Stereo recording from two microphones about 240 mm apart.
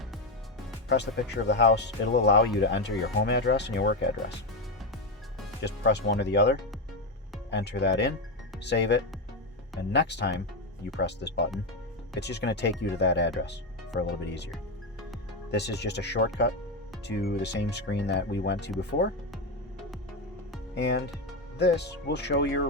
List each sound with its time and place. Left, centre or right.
0.9 s speech: left
5.6 s speech: left
15.5 s speech: left
20.7 s speech: left